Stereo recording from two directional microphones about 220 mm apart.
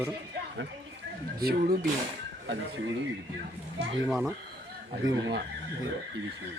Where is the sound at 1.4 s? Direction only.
45° right (ahead or behind).